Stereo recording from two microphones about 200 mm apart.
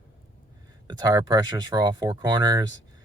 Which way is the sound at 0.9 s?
20° right (ahead or behind).